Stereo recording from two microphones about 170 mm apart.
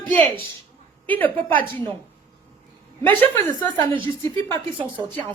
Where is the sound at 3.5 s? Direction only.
30° right (ahead or behind).